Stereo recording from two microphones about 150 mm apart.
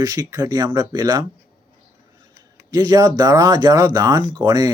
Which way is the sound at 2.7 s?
25° right (ahead or behind).